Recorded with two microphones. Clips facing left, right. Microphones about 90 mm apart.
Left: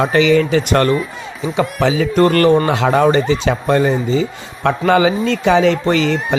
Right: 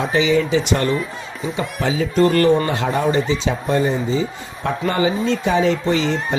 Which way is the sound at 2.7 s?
90° left.